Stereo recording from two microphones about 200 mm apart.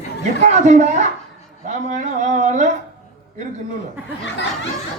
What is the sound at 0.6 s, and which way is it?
A man's voice, 35° right (ahead or behind).